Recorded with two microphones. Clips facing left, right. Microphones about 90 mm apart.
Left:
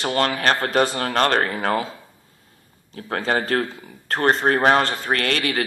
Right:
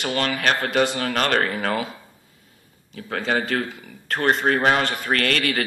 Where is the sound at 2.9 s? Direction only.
35° left (ahead or behind).